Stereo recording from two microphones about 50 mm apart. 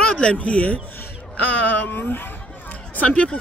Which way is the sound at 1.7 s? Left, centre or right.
Left.